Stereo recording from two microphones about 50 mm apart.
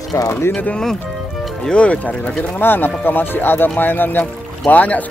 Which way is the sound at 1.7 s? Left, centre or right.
Left.